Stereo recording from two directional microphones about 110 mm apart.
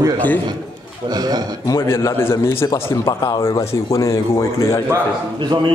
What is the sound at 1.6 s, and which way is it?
A man's voice, 25° left (ahead or behind).